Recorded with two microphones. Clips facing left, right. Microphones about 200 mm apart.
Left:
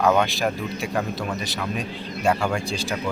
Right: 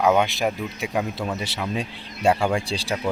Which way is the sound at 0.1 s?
20° right (ahead or behind).